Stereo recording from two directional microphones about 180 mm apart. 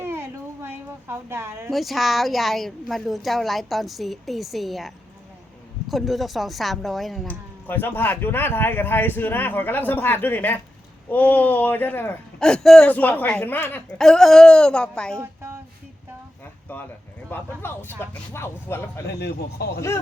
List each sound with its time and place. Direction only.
0.0 s a sound: 10° right (ahead or behind)
1.7 s a woman's voice: centre (ahead or behind)
5.9 s a woman's voice: centre (ahead or behind)
7.7 s speech: 10° left (ahead or behind)
15.2 s a sound: 15° right (ahead or behind)
17.2 s speech: 10° left (ahead or behind)
19.2 s speech: 60° left (ahead or behind)